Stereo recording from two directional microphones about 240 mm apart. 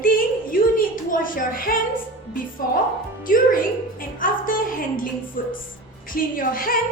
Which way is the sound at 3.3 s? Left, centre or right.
Left.